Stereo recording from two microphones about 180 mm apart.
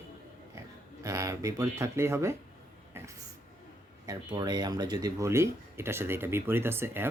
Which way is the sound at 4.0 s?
20° right (ahead or behind).